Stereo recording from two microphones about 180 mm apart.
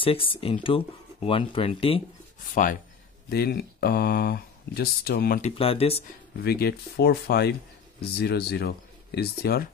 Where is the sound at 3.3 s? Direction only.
60° left (ahead or behind).